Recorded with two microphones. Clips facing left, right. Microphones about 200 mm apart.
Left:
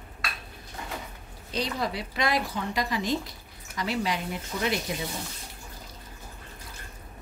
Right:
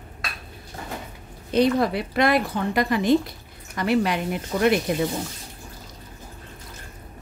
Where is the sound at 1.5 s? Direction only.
55° right (ahead or behind).